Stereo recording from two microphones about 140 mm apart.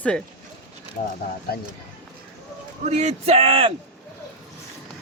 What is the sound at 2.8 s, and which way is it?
Speech, 50° right (ahead or behind).